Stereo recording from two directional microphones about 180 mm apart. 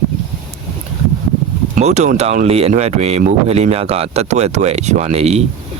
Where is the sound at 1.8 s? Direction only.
40° right (ahead or behind).